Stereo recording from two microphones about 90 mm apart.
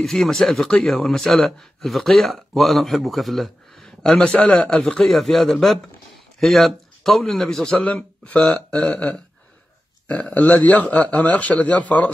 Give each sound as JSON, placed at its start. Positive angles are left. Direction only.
{"t": 0.0, "sound": "a man's voice", "side_deg": 5}
{"t": 4.2, "sound": "a man's voice", "side_deg": 15}